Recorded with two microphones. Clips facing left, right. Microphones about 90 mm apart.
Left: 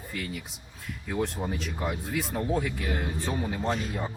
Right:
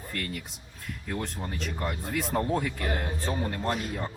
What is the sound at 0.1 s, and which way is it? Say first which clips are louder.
Speech: even; centre (ahead or behind).